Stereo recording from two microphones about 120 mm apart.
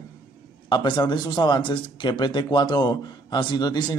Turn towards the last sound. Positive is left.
turn(degrees=35)  # may be behind; listen again after turning